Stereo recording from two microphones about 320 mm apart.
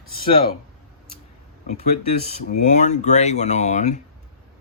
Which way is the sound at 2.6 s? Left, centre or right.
Left.